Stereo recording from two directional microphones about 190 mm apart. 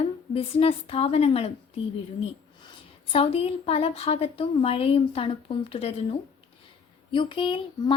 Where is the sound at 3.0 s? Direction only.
30° left (ahead or behind).